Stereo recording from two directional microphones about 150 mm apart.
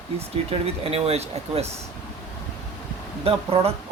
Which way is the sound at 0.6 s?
40° right (ahead or behind).